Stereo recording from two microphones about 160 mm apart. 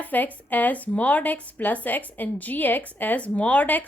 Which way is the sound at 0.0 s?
10° left (ahead or behind).